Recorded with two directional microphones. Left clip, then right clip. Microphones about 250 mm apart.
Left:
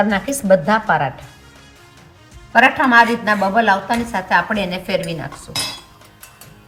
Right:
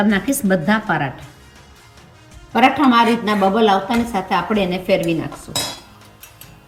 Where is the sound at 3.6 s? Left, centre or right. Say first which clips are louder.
Even; left.